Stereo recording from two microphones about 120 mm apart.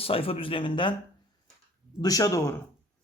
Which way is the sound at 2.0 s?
30° left (ahead or behind).